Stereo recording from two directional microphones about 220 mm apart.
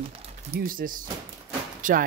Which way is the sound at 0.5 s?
40° right (ahead or behind).